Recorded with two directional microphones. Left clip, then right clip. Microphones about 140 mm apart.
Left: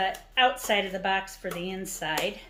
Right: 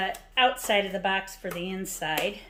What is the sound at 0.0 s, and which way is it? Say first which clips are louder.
Speech: even; 40° right (ahead or behind).